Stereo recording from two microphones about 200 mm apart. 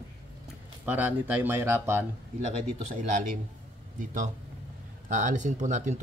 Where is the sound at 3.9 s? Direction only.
40° right (ahead or behind).